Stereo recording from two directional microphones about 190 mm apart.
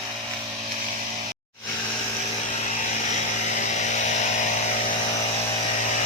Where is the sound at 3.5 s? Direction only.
40° left (ahead or behind).